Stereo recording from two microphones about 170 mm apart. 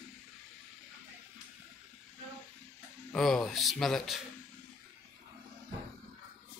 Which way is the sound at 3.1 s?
5° left (ahead or behind).